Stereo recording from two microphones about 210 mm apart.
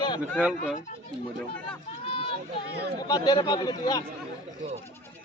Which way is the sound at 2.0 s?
25° left (ahead or behind).